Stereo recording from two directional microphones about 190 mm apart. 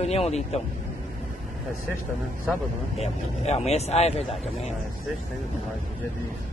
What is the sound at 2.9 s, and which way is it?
Speech, 35° left (ahead or behind).